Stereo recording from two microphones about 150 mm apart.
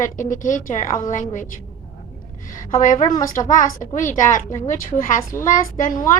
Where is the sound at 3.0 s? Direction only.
20° left (ahead or behind).